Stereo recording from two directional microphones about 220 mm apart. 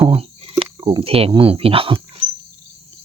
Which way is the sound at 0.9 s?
25° right (ahead or behind).